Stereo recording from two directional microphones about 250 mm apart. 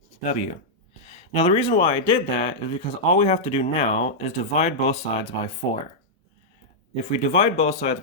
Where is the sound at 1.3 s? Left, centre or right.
Left.